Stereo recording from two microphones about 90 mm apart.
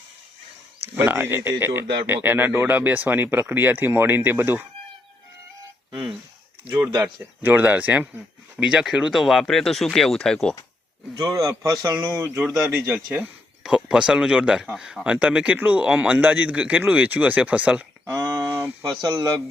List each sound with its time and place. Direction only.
0.8 s speech: 25° right (ahead or behind)
7.0 s speech: 20° right (ahead or behind)
8.5 s speech: 10° right (ahead or behind)
11.3 s a man's voice: 40° right (ahead or behind)
12.4 s a man's voice: 10° right (ahead or behind)
18.1 s a sound: 40° right (ahead or behind)
18.4 s a sound: 20° right (ahead or behind)
19.0 s speech: 50° right (ahead or behind)